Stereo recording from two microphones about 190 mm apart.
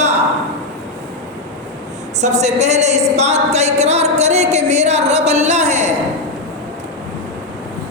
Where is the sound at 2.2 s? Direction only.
35° right (ahead or behind).